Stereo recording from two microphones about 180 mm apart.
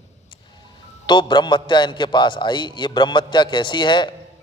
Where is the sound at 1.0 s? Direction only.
25° left (ahead or behind).